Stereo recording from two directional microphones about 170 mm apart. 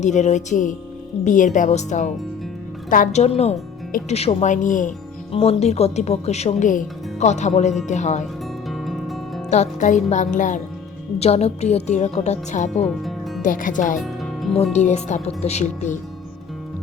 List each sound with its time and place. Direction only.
0.0 s speech: 45° left (ahead or behind)
5.3 s speech: 35° left (ahead or behind)
8.6 s music: centre (ahead or behind)
9.5 s speech: 45° left (ahead or behind)
11.2 s speech: 35° left (ahead or behind)
12.8 s music: centre (ahead or behind)
13.4 s speech: 50° left (ahead or behind)
14.5 s speech: 40° left (ahead or behind)